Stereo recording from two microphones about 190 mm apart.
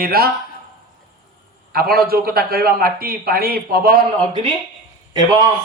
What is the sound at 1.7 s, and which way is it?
Speech, 50° right (ahead or behind).